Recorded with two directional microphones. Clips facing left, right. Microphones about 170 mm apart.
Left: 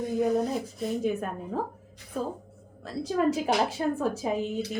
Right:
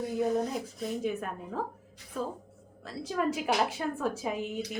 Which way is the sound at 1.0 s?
40° left (ahead or behind).